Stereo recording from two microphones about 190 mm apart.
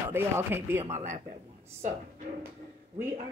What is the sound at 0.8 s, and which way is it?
Speech, 40° right (ahead or behind).